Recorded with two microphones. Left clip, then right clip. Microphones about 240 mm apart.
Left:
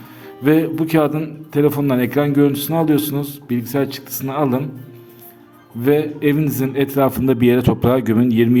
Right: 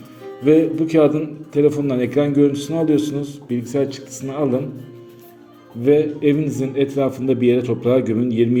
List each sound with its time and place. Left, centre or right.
0.4 s a man's voice: left
5.8 s a man's voice: left